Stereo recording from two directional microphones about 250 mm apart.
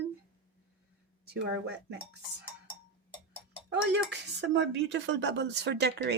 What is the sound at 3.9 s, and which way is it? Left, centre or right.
Speech, right.